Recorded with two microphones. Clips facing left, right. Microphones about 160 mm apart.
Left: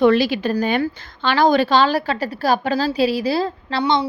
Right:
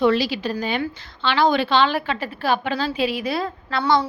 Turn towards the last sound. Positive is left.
turn(degrees=20)  # may be behind; listen again after turning